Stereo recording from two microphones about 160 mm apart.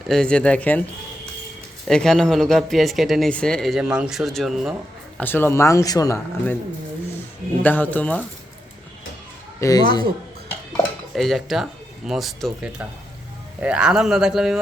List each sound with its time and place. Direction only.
0.1 s speech: 5° left (ahead or behind)
1.9 s speech: 5° left (ahead or behind)
5.1 s speech: 10° left (ahead or behind)
7.6 s speech: 10° left (ahead or behind)
9.6 s speech: 20° left (ahead or behind)
11.1 s speech: centre (ahead or behind)